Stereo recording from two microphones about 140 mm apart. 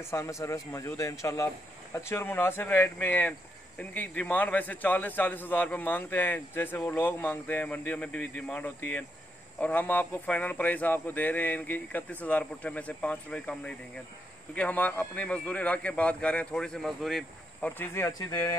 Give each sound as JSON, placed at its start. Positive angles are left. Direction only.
{"t": 0.1, "sound": "a man's voice", "side_deg": 20}